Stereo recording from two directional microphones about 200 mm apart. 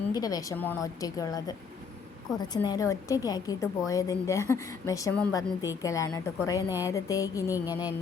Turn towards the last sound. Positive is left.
turn(degrees=15)  # may be behind; listen again after turning